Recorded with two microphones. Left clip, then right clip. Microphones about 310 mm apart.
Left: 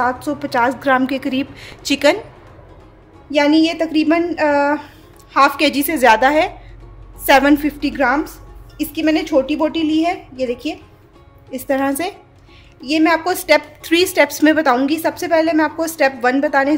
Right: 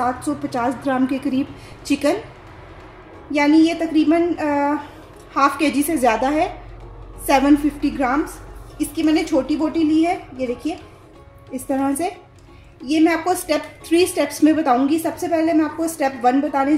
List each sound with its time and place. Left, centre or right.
0.0 s a woman's voice: left
3.3 s a woman's voice: left
11.7 s a woman's voice: left